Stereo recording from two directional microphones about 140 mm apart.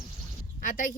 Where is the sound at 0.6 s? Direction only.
75° left (ahead or behind).